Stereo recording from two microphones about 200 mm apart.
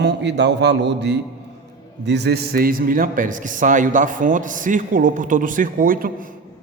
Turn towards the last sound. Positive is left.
turn(degrees=-45)  # may be behind; listen again after turning